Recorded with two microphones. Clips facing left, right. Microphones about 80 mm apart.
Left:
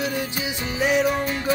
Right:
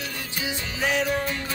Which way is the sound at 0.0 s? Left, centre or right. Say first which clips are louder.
Left 6 dB; centre.